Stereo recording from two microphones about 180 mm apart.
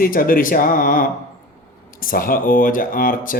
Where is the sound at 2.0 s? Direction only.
50° left (ahead or behind).